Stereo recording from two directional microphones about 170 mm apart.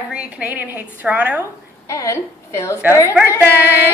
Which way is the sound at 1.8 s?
20° left (ahead or behind).